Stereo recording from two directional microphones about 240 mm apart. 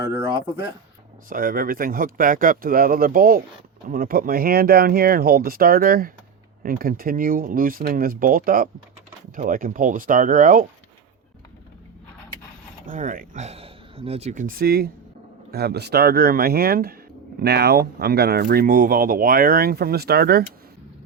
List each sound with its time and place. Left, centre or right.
0.0 s a sound: centre
1.3 s speech: right
12.8 s speech: right